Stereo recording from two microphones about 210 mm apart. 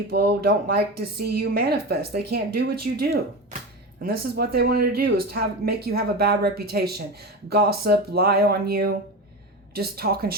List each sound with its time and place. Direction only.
0.1 s speech: 50° right (ahead or behind)